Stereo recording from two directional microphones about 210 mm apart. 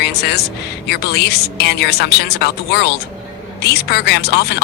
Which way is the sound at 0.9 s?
50° left (ahead or behind).